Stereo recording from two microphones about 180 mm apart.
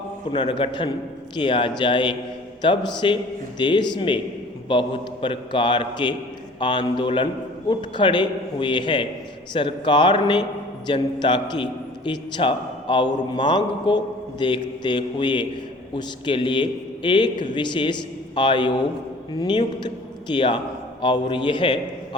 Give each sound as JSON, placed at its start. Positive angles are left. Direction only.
{"t": 0.3, "sound": "a man's voice", "side_deg": 25}